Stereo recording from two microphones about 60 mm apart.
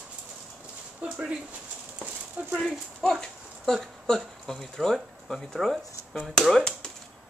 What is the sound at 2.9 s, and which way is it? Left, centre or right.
Speech, centre.